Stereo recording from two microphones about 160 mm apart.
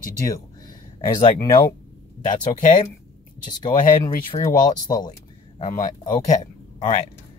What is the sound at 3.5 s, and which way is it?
Speech, 30° left (ahead or behind).